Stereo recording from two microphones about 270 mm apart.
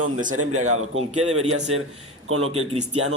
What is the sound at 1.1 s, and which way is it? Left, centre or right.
Speech, right.